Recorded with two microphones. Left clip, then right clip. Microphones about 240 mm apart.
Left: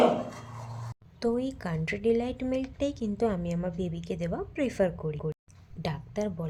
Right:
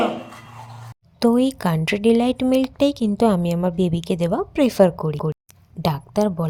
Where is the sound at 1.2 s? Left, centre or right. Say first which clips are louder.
Right 11 dB; right.